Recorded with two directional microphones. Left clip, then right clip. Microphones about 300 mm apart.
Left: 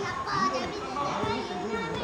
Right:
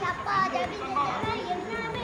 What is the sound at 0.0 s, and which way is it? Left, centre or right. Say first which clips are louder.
Music: right 2 dB; centre.